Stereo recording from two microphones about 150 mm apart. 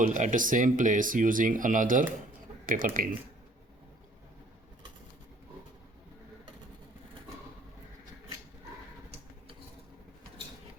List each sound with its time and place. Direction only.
0.0 s speech: 55° right (ahead or behind)